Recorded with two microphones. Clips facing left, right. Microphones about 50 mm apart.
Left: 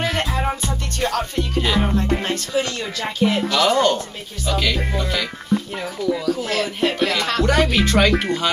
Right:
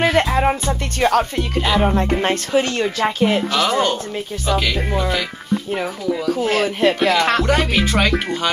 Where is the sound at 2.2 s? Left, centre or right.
Right.